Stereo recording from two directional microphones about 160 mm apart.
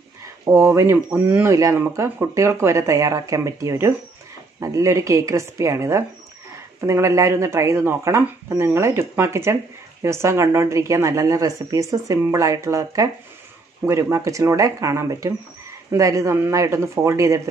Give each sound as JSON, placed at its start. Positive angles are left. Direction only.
{"t": 0.2, "sound": "speech", "side_deg": -20}